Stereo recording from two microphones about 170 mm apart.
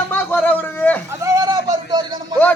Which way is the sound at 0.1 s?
10° left (ahead or behind).